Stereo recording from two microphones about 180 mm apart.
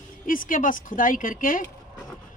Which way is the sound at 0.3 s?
50° left (ahead or behind).